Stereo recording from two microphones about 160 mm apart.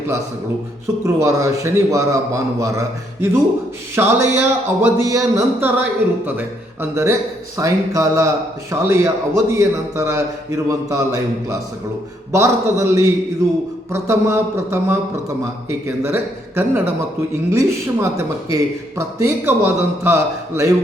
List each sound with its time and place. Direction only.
1.0 s a man's voice: 20° right (ahead or behind)
16.0 s a man's voice: 15° right (ahead or behind)